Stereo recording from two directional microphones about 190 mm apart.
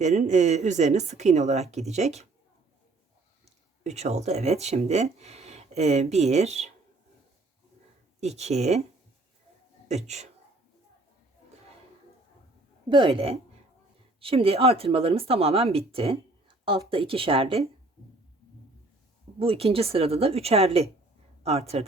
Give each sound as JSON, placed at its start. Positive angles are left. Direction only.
{"t": 0.0, "sound": "speech", "side_deg": -35}
{"t": 3.4, "sound": "speech", "side_deg": -35}
{"t": 8.2, "sound": "speech", "side_deg": -35}
{"t": 9.9, "sound": "speech", "side_deg": -35}
{"t": 12.9, "sound": "speech", "side_deg": -25}
{"t": 19.4, "sound": "speech", "side_deg": -30}